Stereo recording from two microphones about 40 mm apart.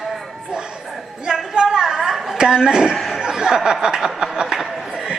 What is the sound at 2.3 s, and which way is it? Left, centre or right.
Speech, right.